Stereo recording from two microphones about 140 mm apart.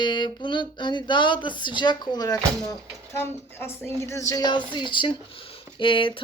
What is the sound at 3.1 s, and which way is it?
Speech, 15° left (ahead or behind).